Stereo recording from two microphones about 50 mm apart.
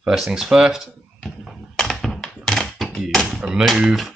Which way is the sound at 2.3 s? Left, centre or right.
Centre.